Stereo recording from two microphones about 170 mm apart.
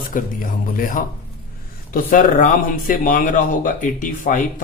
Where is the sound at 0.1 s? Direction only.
50° left (ahead or behind).